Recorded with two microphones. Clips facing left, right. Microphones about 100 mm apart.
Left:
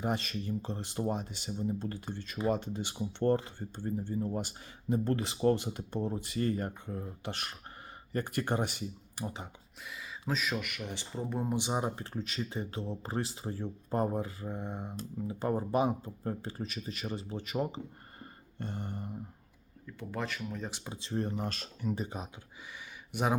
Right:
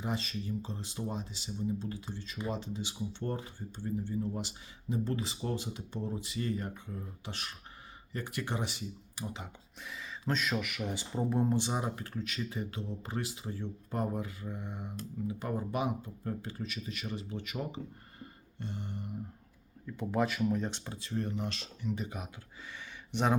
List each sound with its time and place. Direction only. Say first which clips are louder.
0.0 s speech: left 3 dB; 55° left (ahead or behind)
3.8 s speech: left 1 dB; 40° left (ahead or behind)
9.8 s speech: right 2 dB; centre (ahead or behind)
11.5 s speech: left 1 dB; 20° left (ahead or behind)
11.9 s speech: left 1 dB; 30° left (ahead or behind)
18.2 s music: left 2 dB; 50° left (ahead or behind)
19.9 s speech: right 6 dB; 10° right (ahead or behind)
20.7 s speech: right 2 dB; 5° left (ahead or behind)
20.9 s speech: left 5 dB; 30° left (ahead or behind); by 22.0 s 45° left (ahead or behind)
22.0 s speech: left 1 dB; 30° left (ahead or behind)
23.1 s speech: right 1 dB; 10° left (ahead or behind)